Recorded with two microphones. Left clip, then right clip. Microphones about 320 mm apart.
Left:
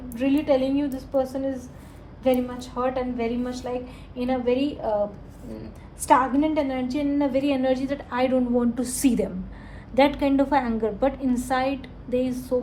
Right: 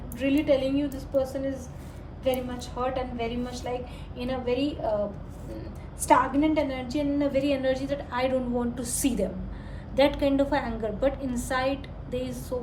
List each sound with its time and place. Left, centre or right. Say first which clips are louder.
0.2 s a woman's voice: left 2 dB; centre
6.1 s a woman's voice: left 2 dB; centre